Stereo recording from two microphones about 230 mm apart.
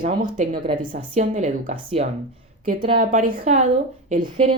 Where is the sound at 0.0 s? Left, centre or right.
Right.